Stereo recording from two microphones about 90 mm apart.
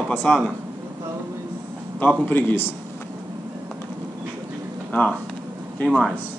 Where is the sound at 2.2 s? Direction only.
20° left (ahead or behind).